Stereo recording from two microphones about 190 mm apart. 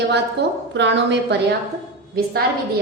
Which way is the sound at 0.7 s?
70° right (ahead or behind).